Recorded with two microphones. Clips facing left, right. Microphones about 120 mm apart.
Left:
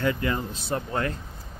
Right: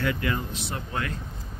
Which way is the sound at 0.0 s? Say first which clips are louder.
Left 2 dB; 30° left (ahead or behind).